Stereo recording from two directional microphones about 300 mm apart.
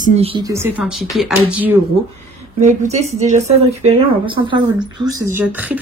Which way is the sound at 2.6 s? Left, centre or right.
Right.